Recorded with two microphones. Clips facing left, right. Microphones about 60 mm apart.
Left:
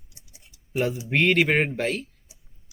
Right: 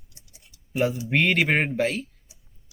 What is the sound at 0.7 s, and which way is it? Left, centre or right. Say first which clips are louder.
Speech: right 1 dB; centre.